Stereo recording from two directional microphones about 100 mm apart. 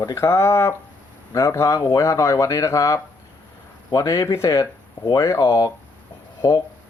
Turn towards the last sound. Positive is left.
turn(degrees=35)  # may be behind; listen again after turning